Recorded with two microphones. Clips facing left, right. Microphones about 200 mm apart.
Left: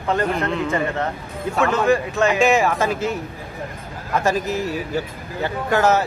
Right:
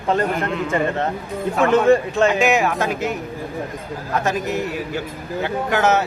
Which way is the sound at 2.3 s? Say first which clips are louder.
Left 1 dB; centre (ahead or behind).